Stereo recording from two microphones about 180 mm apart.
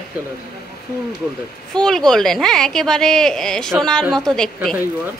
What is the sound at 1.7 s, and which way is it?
A woman's voice, 5° left (ahead or behind).